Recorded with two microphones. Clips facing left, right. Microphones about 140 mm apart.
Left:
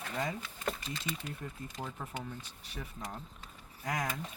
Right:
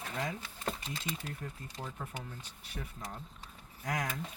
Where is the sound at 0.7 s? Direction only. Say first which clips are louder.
Left 1 dB; 30° right (ahead or behind).